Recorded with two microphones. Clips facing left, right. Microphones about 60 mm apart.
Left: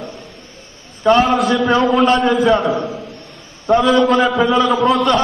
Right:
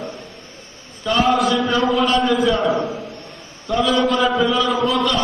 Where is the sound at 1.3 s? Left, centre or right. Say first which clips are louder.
Left 3 dB; left.